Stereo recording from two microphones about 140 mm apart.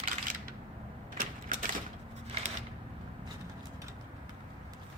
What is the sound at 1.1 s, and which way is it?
Typewriter, 85° right.